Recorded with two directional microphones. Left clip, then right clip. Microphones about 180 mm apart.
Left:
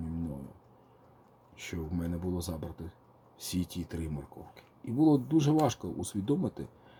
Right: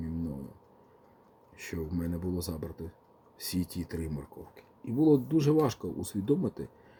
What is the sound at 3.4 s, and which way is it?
Speech, 40° right (ahead or behind).